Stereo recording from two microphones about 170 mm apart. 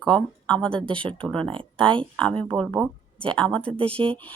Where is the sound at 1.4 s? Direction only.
30° right (ahead or behind).